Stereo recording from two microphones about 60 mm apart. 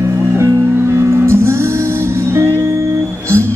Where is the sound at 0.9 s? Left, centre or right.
Right.